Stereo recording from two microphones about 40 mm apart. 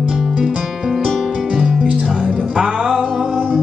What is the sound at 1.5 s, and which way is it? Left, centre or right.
Music, centre.